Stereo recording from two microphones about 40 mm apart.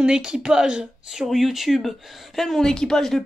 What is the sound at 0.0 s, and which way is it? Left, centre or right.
Speech, right.